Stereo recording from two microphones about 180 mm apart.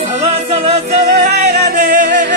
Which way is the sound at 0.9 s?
40° right (ahead or behind).